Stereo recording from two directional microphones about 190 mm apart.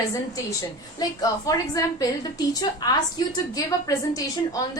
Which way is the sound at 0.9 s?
20° left (ahead or behind).